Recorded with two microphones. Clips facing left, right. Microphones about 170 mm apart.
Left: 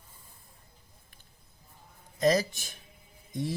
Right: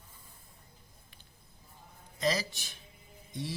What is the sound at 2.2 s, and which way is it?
Speech, 50° left (ahead or behind).